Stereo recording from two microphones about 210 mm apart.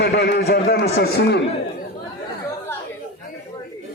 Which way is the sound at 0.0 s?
50° left (ahead or behind).